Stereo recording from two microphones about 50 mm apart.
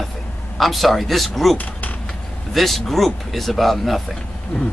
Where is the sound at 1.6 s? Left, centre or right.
Left.